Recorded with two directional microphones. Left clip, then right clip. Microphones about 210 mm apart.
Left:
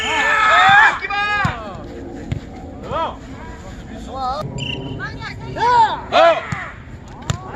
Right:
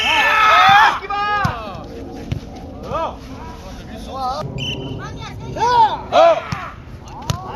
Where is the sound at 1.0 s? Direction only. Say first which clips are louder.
Even; 40° right (ahead or behind).